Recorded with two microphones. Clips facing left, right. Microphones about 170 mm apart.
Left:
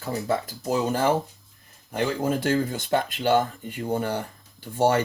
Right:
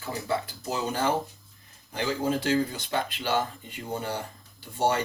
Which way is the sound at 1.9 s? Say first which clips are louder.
Left 3 dB; 50° left (ahead or behind).